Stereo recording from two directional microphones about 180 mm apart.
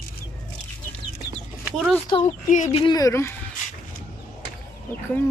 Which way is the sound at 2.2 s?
40° left (ahead or behind).